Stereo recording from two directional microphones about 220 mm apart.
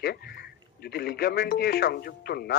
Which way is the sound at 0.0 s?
45° left (ahead or behind).